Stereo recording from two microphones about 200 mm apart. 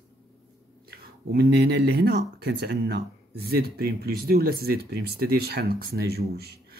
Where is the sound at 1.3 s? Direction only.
55° right (ahead or behind).